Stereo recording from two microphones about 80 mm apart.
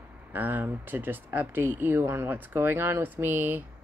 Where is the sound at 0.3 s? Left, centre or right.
Right.